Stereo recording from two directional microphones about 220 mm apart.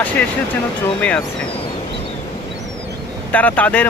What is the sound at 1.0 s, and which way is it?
Speech, 5° left (ahead or behind).